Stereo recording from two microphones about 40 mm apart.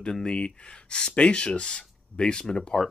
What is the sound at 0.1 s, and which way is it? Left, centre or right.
Speech, centre.